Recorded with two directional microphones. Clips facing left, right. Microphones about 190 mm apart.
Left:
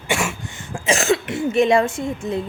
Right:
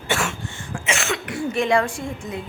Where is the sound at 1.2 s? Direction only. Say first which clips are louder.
Left 2 dB; 25° left (ahead or behind).